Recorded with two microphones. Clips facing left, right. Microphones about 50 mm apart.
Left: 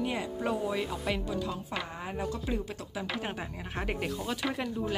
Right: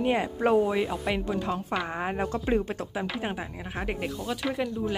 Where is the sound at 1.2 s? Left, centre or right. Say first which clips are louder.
Right 5 dB; right.